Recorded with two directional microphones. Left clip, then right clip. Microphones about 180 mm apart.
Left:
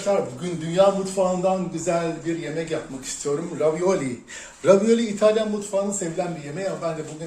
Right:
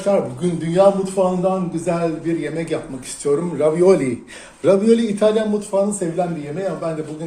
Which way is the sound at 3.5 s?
35° right (ahead or behind).